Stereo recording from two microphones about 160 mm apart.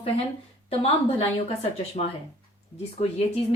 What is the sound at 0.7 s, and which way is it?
A woman's voice, 35° left (ahead or behind).